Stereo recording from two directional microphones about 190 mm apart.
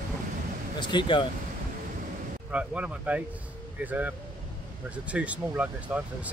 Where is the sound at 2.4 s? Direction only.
5° right (ahead or behind).